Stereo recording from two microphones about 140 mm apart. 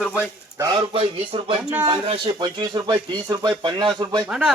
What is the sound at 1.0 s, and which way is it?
Speech, 40° right (ahead or behind).